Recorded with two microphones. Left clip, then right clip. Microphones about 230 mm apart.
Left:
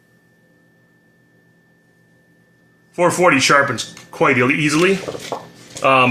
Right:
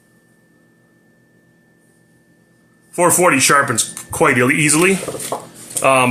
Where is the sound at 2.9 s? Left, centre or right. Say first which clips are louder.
Right 1 dB; centre.